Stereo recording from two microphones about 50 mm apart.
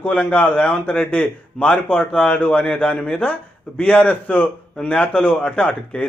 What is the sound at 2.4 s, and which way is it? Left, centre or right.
A man's voice, left.